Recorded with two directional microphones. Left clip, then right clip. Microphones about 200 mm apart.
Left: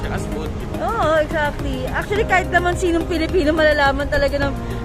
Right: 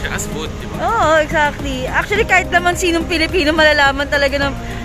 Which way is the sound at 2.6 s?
15° right (ahead or behind).